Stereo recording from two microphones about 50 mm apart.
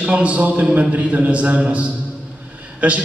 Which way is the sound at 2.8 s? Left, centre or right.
Right.